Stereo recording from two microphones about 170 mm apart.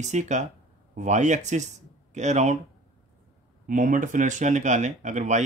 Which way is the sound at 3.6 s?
50° right (ahead or behind).